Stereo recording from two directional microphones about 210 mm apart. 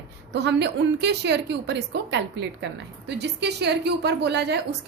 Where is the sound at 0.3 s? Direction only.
55° right (ahead or behind).